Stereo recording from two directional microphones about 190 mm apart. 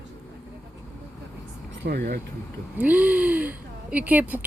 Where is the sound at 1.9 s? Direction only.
50° right (ahead or behind).